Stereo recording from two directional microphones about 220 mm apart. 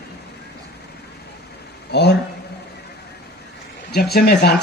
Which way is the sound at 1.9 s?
50° left (ahead or behind).